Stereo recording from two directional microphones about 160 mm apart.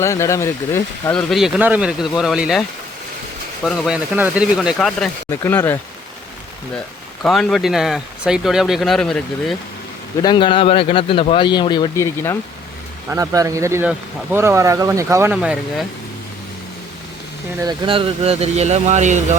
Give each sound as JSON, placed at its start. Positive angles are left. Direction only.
{"t": 0.0, "sound": "speech", "side_deg": 15}
{"t": 1.1, "sound": "speech", "side_deg": 0}
{"t": 5.3, "sound": "speech", "side_deg": 15}
{"t": 7.2, "sound": "speech", "side_deg": 0}
{"t": 10.2, "sound": "speech", "side_deg": 30}
{"t": 13.1, "sound": "speech", "side_deg": -20}
{"t": 15.3, "sound": "speech", "side_deg": -5}
{"t": 17.8, "sound": "speech", "side_deg": -35}